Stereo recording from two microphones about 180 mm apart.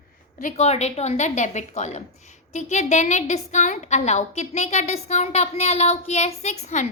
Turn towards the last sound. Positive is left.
turn(degrees=40)  # may be behind; listen again after turning